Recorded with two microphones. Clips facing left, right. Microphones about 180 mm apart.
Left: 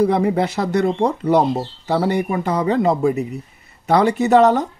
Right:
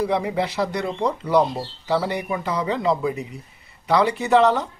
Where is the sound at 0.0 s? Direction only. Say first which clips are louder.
Left 6 dB; 45° left (ahead or behind).